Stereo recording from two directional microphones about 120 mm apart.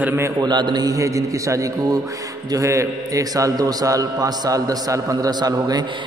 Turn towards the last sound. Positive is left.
turn(degrees=-35)  # may be behind; listen again after turning